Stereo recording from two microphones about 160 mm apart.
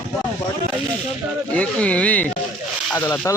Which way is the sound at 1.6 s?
10° left (ahead or behind).